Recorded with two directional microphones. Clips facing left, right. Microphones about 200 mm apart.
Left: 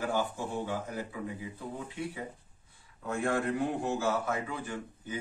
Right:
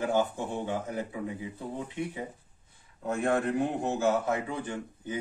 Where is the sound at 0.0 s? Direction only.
20° right (ahead or behind).